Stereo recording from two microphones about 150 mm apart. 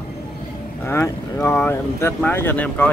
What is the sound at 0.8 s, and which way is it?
Speech, 15° left (ahead or behind).